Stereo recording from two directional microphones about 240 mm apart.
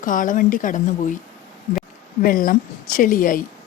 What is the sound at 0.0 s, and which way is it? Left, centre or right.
Speech, left.